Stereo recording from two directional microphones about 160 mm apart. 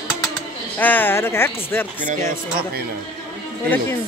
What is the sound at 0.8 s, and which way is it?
Speech, 10° left (ahead or behind).